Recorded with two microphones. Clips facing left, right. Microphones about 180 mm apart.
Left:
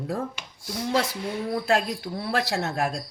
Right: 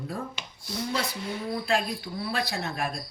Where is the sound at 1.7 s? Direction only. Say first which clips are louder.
Left 2 dB; 90° left.